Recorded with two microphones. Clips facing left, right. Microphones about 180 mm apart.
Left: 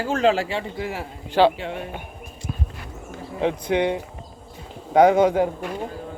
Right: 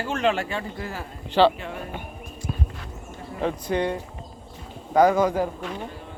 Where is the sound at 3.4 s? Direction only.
20° left (ahead or behind).